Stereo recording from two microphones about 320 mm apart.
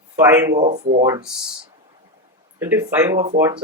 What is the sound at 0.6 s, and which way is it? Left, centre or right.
Speech, right.